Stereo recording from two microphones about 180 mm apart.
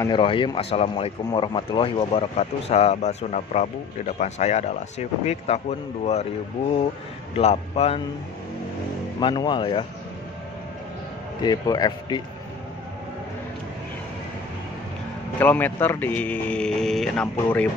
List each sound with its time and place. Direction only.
0.0 s speech: 25° left (ahead or behind)
7.3 s speech: 35° left (ahead or behind)
9.2 s a man's voice: 25° left (ahead or behind)
11.4 s a man's voice: 20° left (ahead or behind)
15.3 s speech: 10° left (ahead or behind)